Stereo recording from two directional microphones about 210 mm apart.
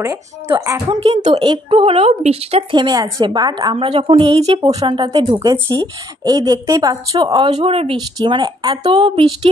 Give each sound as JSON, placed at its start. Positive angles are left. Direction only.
{"t": 0.0, "sound": "speech", "side_deg": -15}
{"t": 1.0, "sound": "speech", "side_deg": -30}